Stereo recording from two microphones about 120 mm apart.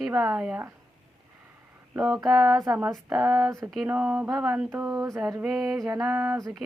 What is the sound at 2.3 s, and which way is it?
Speech, 5° right (ahead or behind).